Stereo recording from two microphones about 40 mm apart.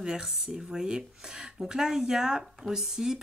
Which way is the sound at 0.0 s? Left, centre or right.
Centre.